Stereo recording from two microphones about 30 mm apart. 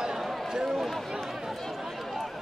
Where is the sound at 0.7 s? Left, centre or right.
Centre.